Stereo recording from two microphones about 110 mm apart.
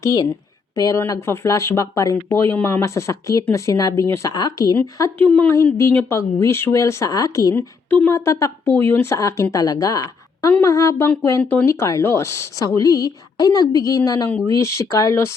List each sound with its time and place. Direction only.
0.0 s a woman's voice: 35° left (ahead or behind)
5.1 s a woman's voice: 15° left (ahead or behind); by 7.5 s 35° left (ahead or behind)
7.9 s speech: 15° left (ahead or behind)
8.1 s a woman's voice: 25° left (ahead or behind)